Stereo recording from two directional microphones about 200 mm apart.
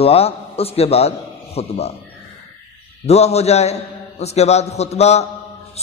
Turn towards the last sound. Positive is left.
turn(degrees=30)  # may be behind; listen again after turning